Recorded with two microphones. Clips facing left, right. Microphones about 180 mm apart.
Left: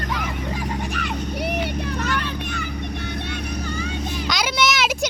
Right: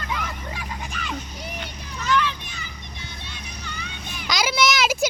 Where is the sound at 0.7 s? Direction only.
65° left (ahead or behind).